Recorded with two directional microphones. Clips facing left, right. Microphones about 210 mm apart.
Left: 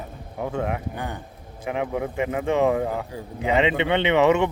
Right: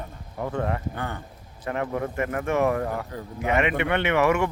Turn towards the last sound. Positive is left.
turn(degrees=20)  # may be behind; listen again after turning